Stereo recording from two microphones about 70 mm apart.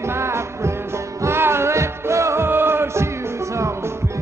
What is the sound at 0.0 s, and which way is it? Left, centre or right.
Music, right.